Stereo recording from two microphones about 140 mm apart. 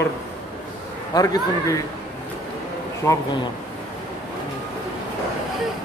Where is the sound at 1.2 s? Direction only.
25° left (ahead or behind).